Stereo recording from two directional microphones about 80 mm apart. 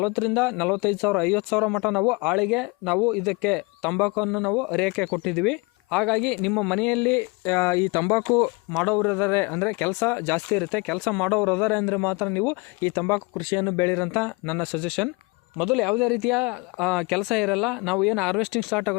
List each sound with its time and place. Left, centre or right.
0.0 s speech: centre
1.6 s speech: centre
4.2 s speech: centre
6.7 s speech: centre
7.1 s speech: left
7.9 s speech: left
8.8 s speech: centre
9.1 s speech: left
10.6 s speech: centre; by 13.2 s left
13.3 s speech: left
14.8 s speech: centre
15.5 s speech: centre
16.8 s speech: centre